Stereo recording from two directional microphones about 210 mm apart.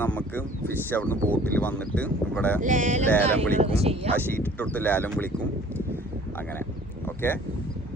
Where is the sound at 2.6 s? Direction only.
35° right (ahead or behind).